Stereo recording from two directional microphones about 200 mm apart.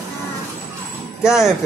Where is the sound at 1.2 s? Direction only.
5° right (ahead or behind).